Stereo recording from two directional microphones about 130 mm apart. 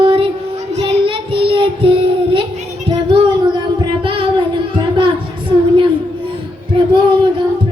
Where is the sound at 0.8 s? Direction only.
40° right (ahead or behind).